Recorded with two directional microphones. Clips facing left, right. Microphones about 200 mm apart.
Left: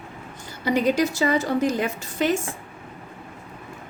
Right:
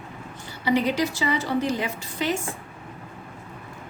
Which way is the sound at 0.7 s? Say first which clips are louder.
Left 2 dB; 45° left (ahead or behind).